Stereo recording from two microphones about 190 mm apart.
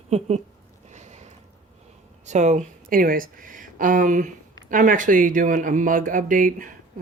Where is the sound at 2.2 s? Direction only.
40° right (ahead or behind).